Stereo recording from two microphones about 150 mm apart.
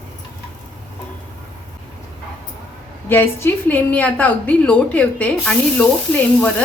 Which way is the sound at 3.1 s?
15° left (ahead or behind).